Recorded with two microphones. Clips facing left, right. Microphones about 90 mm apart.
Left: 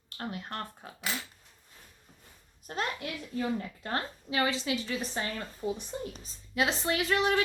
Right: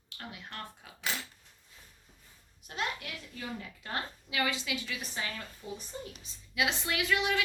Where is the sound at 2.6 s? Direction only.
40° left (ahead or behind).